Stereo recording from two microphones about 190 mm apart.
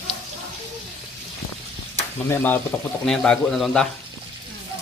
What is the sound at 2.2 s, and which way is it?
Speech, 10° left (ahead or behind).